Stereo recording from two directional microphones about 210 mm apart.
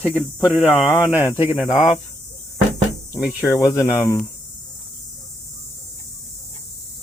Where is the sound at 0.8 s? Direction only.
20° left (ahead or behind).